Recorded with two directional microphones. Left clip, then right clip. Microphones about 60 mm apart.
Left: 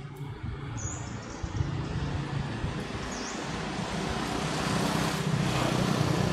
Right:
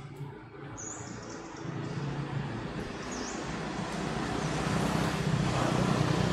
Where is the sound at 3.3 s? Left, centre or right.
Left.